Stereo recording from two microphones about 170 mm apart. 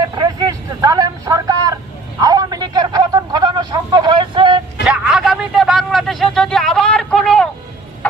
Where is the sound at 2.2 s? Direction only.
20° right (ahead or behind).